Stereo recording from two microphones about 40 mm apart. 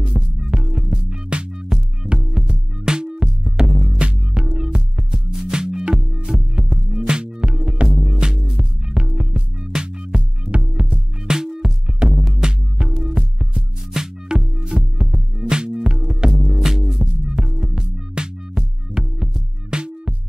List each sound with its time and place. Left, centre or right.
0.4 s music: centre
1.7 s music: centre
19.7 s music: right